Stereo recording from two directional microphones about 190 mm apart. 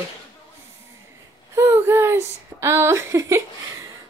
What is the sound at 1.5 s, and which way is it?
A woman's voice, 15° right (ahead or behind).